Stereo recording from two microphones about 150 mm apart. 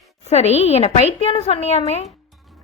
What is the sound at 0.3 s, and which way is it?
Speech, 45° left (ahead or behind).